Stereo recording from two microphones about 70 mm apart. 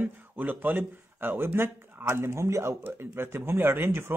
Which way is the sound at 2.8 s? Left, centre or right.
Right.